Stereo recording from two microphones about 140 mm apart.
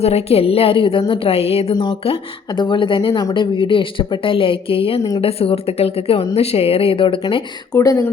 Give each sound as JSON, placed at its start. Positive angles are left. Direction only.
{"t": 0.0, "sound": "a woman's voice", "side_deg": 45}
{"t": 1.7, "sound": "a woman's voice", "side_deg": 30}
{"t": 7.7, "sound": "speech", "side_deg": 25}